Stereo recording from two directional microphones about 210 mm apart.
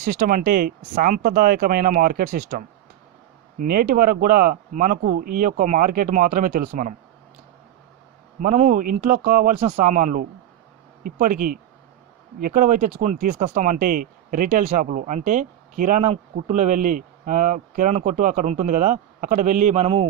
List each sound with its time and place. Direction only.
0.0 s speech: 40° right (ahead or behind)
8.4 s speech: 35° right (ahead or behind)